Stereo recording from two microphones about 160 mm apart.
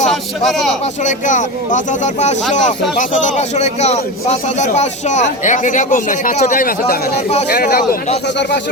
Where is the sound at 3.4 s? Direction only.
45° left (ahead or behind); by 8.0 s 65° left (ahead or behind).